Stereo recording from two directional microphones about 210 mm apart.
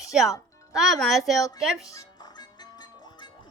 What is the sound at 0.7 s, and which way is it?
Speech, centre (ahead or behind).